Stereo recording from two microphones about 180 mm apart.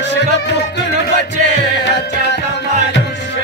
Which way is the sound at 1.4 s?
75° left (ahead or behind).